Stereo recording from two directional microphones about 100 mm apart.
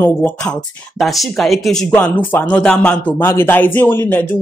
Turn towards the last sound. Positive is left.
turn(degrees=15)  # may be behind; listen again after turning